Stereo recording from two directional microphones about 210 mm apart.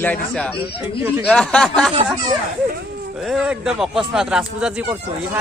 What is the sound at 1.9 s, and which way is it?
Speech, 25° right (ahead or behind).